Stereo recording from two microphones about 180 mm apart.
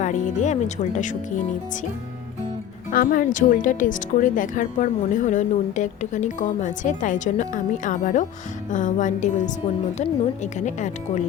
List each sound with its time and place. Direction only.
0.0 s speech: 40° left (ahead or behind)
2.9 s a woman's voice: 50° left (ahead or behind)